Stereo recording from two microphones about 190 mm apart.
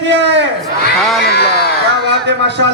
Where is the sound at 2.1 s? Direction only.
65° right (ahead or behind).